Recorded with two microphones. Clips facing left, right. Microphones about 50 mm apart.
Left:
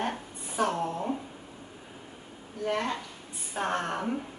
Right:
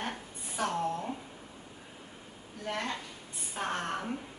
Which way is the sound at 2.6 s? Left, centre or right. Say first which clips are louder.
Left 6 dB; centre.